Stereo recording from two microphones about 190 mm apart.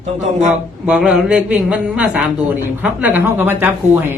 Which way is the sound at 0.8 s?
5° right (ahead or behind).